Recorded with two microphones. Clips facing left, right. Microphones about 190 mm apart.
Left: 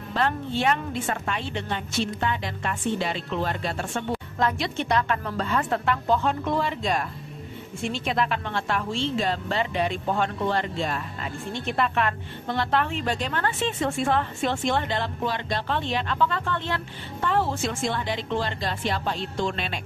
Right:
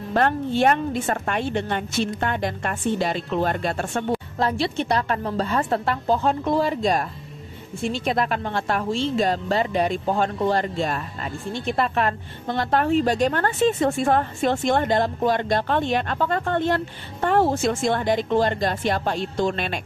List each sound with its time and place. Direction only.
0.1 s a woman's voice: 50° right (ahead or behind)
4.4 s a woman's voice: 35° right (ahead or behind); by 19.8 s 50° right (ahead or behind)